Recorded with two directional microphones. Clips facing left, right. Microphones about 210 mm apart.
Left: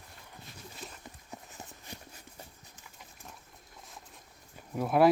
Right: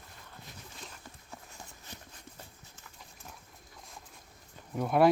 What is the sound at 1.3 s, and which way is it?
Clip-clop, 20° left (ahead or behind).